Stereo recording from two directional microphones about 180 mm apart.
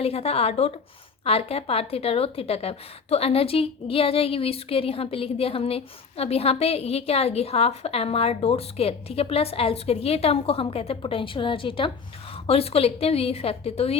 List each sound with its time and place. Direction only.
0.0 s a woman's voice: 35° left (ahead or behind)